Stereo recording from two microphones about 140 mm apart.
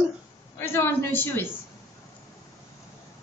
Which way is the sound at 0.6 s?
15° left (ahead or behind).